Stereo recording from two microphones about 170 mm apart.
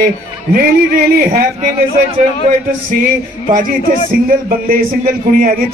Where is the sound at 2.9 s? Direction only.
55° right (ahead or behind).